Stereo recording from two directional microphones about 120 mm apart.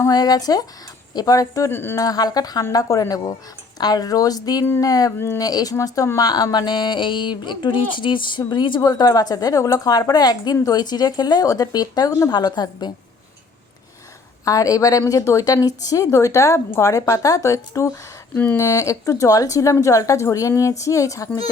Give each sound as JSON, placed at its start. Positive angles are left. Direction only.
{"t": 0.0, "sound": "a woman's voice", "side_deg": 30}
{"t": 14.4, "sound": "a woman's voice", "side_deg": 30}